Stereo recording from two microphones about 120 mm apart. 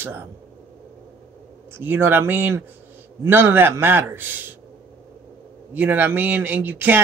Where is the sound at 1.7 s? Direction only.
20° right (ahead or behind).